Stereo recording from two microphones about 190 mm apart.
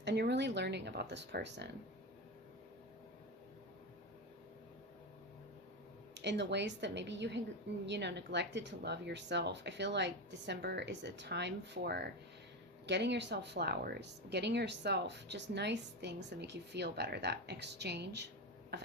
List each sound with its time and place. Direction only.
0.0 s speech: 65° right (ahead or behind)
6.1 s speech: 65° right (ahead or behind)